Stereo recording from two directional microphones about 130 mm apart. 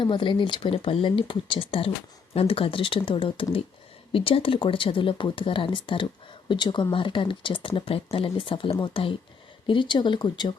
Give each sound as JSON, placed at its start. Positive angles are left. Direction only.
{"t": 0.0, "sound": "speech", "side_deg": 40}